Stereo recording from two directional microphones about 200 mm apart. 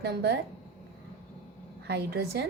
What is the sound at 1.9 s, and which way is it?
Speech, 55° right (ahead or behind).